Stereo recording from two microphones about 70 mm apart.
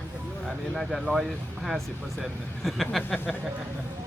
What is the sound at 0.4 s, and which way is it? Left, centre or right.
Speech, centre.